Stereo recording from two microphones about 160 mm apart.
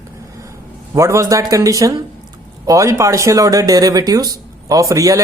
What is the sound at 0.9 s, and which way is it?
Speech, 20° right (ahead or behind).